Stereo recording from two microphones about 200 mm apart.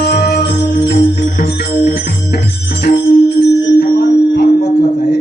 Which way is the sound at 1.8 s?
55° left (ahead or behind).